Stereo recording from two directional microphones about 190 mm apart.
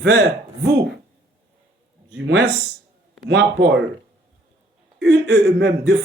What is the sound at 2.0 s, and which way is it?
A man's voice, 75° right (ahead or behind).